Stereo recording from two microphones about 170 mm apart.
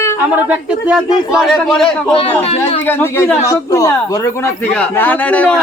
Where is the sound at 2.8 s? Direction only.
15° left (ahead or behind).